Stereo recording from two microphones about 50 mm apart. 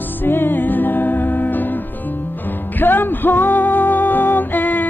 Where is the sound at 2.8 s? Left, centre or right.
Left.